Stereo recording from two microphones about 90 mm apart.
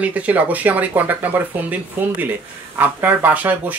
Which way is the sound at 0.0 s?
15° right (ahead or behind).